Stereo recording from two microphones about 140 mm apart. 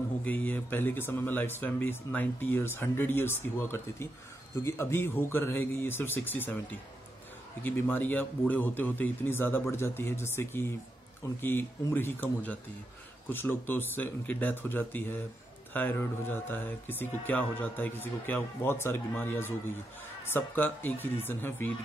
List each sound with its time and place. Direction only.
0.2 s speech: 10° left (ahead or behind)